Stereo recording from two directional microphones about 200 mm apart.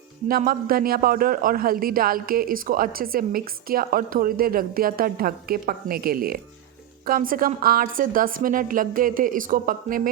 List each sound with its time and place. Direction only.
0.3 s a man's voice: 45° right (ahead or behind)